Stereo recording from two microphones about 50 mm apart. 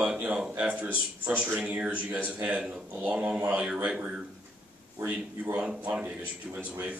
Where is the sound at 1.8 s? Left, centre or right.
Right.